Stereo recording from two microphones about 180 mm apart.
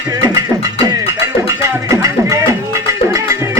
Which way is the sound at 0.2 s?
20° right (ahead or behind).